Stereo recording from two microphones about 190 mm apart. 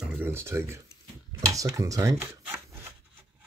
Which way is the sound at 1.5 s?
15° right (ahead or behind).